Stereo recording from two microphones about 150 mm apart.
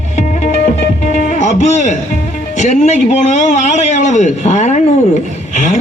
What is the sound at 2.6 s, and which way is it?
A man's voice, 50° left (ahead or behind).